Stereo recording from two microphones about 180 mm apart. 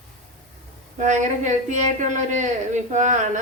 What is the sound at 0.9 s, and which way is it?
A woman's voice, 40° right (ahead or behind).